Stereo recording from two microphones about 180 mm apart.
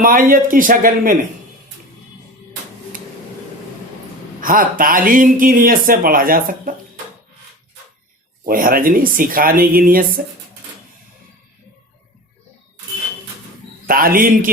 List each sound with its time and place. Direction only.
0.0 s speech: 50° right (ahead or behind)
4.4 s speech: 50° right (ahead or behind)
8.4 s speech: 50° right (ahead or behind)
13.8 s speech: 55° right (ahead or behind)